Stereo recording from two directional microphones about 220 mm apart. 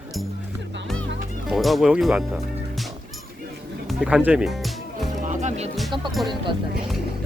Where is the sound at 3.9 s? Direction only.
Centre (ahead or behind).